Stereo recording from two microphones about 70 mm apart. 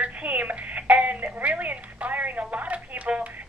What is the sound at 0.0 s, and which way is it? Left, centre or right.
Telephone, right.